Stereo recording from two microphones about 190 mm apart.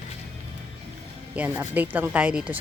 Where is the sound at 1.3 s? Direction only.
10° right (ahead or behind).